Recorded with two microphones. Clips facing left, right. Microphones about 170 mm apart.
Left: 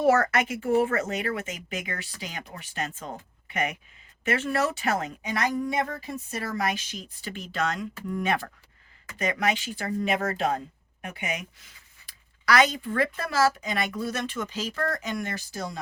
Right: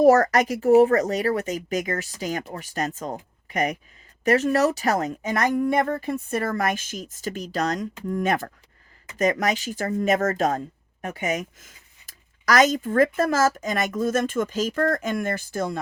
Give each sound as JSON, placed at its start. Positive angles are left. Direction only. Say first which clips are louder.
{"t": 0.0, "sound": "speech", "louder": "right 6 dB", "side_deg": -40}